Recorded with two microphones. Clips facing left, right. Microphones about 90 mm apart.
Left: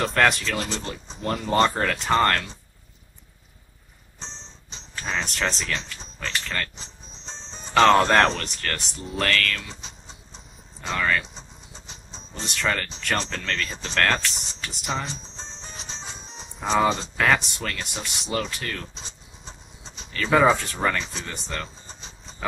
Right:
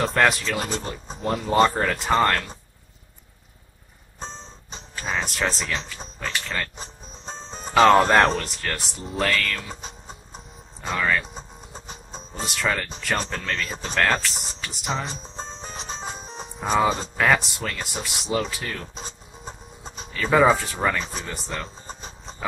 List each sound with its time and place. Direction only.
0.0 s speech: centre (ahead or behind)
4.9 s speech: 5° right (ahead or behind)
6.8 s music: 50° right (ahead or behind)
7.7 s speech: 10° right (ahead or behind)
9.7 s a sound: 50° right (ahead or behind)
10.9 s speech: 5° right (ahead or behind)
11.3 s music: 50° right (ahead or behind)
12.4 s speech: 10° right (ahead or behind)
15.0 s music: 50° right (ahead or behind)
16.5 s speech: 5° right (ahead or behind)
18.9 s music: 50° right (ahead or behind)
20.1 s speech: 5° right (ahead or behind)